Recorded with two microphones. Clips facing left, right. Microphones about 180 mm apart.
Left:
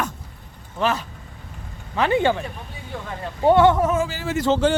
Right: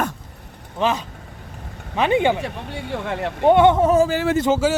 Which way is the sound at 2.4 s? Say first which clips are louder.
Right 6 dB; 80° right.